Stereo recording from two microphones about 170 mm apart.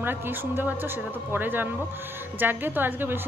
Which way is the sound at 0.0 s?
10° right (ahead or behind).